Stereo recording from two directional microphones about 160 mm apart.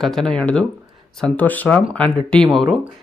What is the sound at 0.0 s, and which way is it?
Speech, 5° left (ahead or behind).